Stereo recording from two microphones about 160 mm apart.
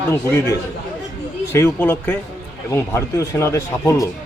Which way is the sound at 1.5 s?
15° left (ahead or behind).